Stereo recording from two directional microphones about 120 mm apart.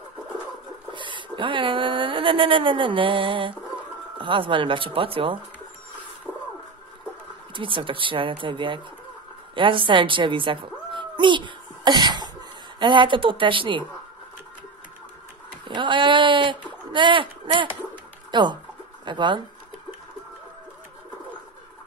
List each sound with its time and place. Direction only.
0.9 s speech: 40° right (ahead or behind)
6.3 s a sound: 10° right (ahead or behind)
7.5 s a woman's voice: 45° right (ahead or behind)
15.6 s speech: 40° right (ahead or behind)